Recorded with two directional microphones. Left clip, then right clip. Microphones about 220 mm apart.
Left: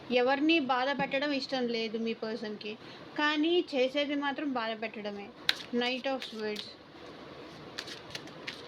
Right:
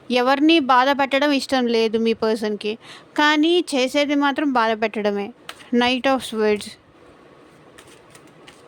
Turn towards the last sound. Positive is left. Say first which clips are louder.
# right 16 dB
turn(degrees=-60)  # may be behind; listen again after turning